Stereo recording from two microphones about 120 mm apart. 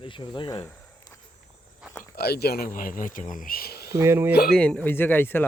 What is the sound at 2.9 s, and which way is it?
Speech, 90° left.